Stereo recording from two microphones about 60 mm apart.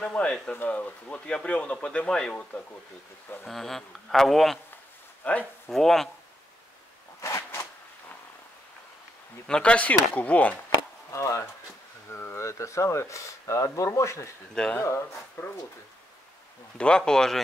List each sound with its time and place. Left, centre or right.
0.0 s speech: centre
3.4 s speech: centre
5.2 s speech: left
5.7 s speech: centre
7.2 s a sound: left
9.5 s speech: centre
11.1 s speech: left
14.5 s speech: centre
14.8 s speech: left
15.3 s speech: left
16.7 s speech: centre